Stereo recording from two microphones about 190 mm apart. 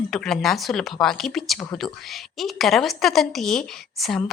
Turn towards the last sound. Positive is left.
turn(degrees=0)  # may be behind; listen again after turning